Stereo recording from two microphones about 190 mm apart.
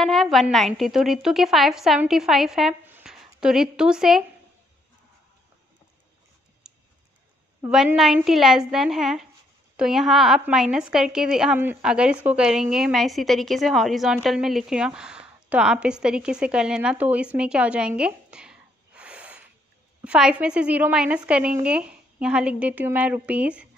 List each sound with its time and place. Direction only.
0.0 s a woman's voice: centre (ahead or behind)
6.6 s typing: 5° right (ahead or behind)
7.6 s a woman's voice: 5° right (ahead or behind)